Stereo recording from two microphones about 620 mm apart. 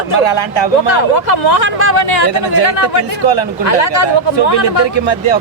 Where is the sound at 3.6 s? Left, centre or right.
Left.